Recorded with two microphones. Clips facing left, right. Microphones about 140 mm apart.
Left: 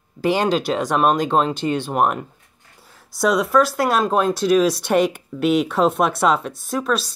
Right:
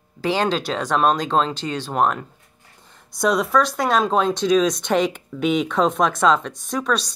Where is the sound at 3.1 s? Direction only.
Centre (ahead or behind).